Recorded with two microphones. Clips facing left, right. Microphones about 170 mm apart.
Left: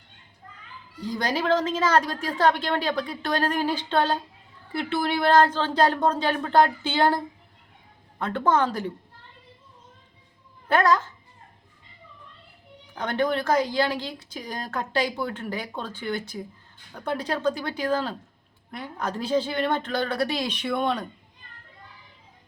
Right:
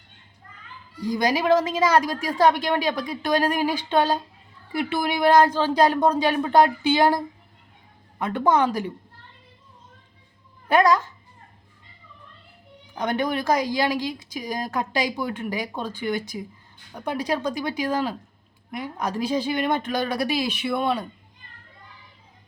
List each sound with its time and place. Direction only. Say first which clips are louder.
1.0 s a woman's voice: right 4 dB; 15° right (ahead or behind)
8.2 s a woman's voice: right 2 dB; 15° right (ahead or behind)
10.7 s a woman's voice: right 2 dB; 15° right (ahead or behind)
12.9 s a woman's voice: even; 15° right (ahead or behind)